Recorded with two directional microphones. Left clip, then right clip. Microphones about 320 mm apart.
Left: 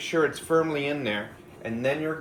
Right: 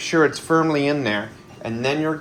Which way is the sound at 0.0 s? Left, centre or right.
Centre.